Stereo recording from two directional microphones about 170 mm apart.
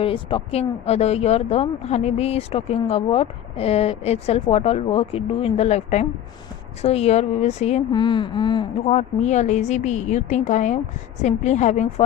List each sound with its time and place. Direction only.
0.0 s speech: 30° left (ahead or behind)
8.0 s speech: 25° left (ahead or behind)
8.9 s a woman's voice: 40° left (ahead or behind)